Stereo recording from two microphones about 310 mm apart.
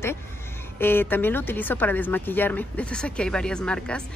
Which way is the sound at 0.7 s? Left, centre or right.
Centre.